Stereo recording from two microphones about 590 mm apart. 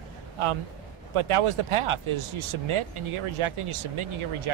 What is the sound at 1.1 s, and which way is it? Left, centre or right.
Speech, right.